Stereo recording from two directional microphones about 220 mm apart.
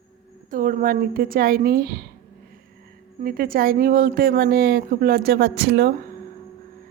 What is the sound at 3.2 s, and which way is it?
A woman's voice, 40° right (ahead or behind).